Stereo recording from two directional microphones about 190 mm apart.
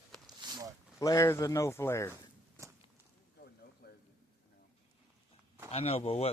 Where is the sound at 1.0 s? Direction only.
15° left (ahead or behind).